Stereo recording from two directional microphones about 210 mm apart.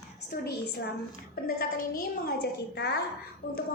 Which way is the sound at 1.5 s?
45° left (ahead or behind).